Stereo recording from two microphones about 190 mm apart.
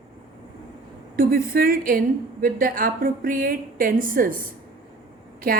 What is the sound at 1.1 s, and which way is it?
A woman's voice, 50° right (ahead or behind).